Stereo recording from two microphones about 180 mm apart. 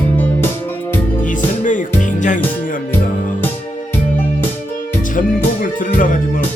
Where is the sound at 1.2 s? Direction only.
45° left (ahead or behind).